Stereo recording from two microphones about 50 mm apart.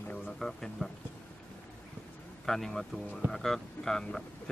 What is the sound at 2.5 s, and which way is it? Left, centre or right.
Speech, centre.